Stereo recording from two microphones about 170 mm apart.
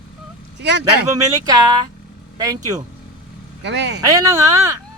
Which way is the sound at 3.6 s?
90° right.